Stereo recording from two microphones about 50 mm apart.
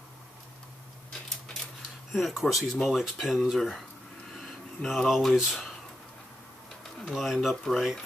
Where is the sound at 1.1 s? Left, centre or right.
Centre.